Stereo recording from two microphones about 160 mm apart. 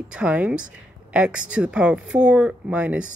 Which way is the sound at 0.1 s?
10° right (ahead or behind).